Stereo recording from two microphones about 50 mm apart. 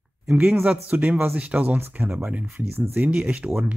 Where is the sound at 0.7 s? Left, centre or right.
Right.